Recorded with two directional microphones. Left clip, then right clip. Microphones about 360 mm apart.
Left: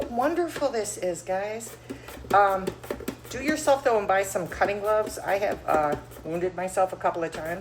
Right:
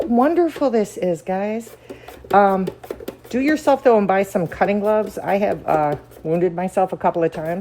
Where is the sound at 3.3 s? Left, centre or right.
Centre.